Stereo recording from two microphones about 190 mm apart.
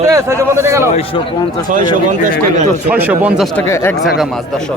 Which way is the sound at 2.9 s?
10° right (ahead or behind).